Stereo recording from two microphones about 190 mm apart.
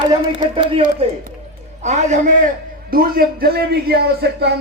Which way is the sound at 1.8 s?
40° right (ahead or behind).